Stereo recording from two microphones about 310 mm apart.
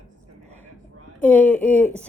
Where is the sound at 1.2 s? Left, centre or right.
Centre.